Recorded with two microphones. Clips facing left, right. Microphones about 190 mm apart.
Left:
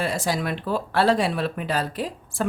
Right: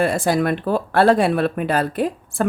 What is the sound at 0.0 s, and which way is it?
Speech, 55° right (ahead or behind).